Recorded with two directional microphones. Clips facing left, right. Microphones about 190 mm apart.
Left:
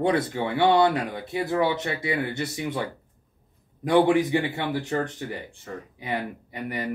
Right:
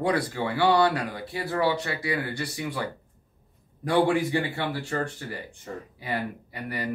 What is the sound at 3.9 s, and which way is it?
Speech, 20° left (ahead or behind).